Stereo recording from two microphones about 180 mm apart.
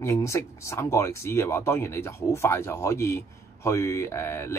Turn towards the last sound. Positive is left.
turn(degrees=15)  # may be behind; listen again after turning